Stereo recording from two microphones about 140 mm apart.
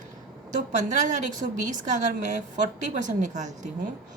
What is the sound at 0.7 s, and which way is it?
A woman's voice, 60° right (ahead or behind).